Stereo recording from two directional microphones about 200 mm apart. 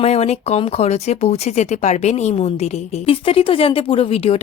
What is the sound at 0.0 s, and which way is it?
Speech, 30° left (ahead or behind).